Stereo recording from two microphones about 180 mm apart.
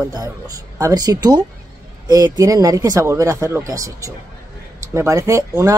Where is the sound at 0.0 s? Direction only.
20° right (ahead or behind).